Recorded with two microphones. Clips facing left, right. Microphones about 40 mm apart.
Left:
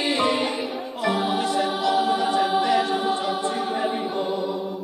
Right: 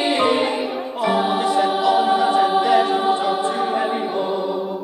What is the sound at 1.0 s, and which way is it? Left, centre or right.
Music, centre.